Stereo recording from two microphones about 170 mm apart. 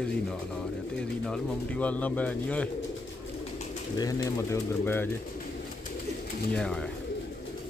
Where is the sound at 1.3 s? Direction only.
5° left (ahead or behind).